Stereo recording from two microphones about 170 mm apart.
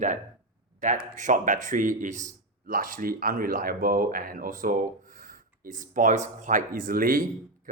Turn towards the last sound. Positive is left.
turn(degrees=-55)  # may be behind; listen again after turning